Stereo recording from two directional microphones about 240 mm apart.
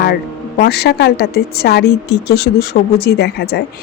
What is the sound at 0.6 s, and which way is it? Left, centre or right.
Speech, left.